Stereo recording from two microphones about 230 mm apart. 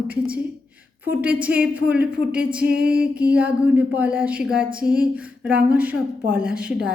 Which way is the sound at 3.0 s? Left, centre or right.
Centre.